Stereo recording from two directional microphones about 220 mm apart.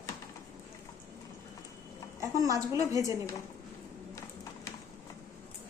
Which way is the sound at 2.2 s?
15° right (ahead or behind).